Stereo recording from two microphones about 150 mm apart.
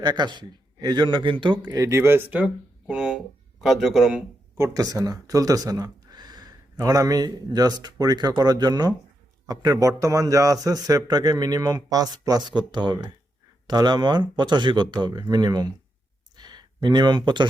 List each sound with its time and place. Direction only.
0.0 s a man's voice: 30° right (ahead or behind)
1.7 s speech: 20° right (ahead or behind); by 4.2 s 5° right (ahead or behind)
4.5 s a man's voice: 20° right (ahead or behind)
16.3 s a sound: 30° right (ahead or behind)